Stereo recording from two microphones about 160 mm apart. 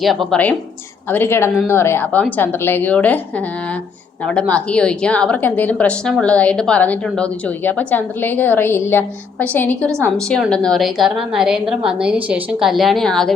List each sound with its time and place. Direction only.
0.0 s a woman's voice: centre (ahead or behind)
4.3 s a woman's voice: 5° left (ahead or behind)